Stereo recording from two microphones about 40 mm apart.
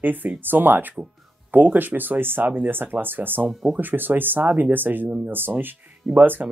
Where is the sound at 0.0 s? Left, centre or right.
Right.